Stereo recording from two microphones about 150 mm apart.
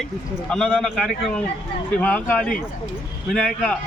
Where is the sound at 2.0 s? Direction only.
10° left (ahead or behind).